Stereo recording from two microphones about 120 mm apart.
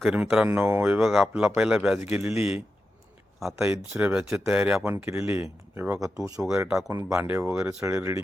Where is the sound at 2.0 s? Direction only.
20° right (ahead or behind).